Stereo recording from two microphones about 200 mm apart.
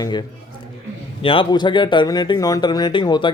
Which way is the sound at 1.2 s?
25° left (ahead or behind).